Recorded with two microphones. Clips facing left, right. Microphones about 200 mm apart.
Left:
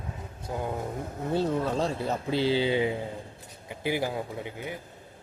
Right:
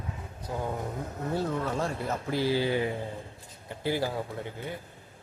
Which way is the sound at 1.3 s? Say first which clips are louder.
Left 4 dB; 25° left (ahead or behind).